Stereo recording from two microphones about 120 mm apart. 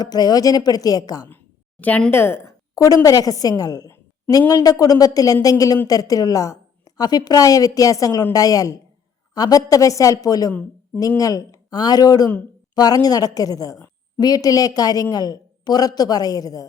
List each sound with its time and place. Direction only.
0.0 s a woman's voice: 30° left (ahead or behind)
1.8 s a woman's voice: 15° left (ahead or behind); by 10.5 s 30° left (ahead or behind)
10.5 s speech: 15° left (ahead or behind)
11.2 s a woman's voice: 30° left (ahead or behind)